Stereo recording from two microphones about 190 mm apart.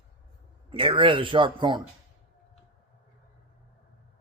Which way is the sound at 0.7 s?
25° right (ahead or behind).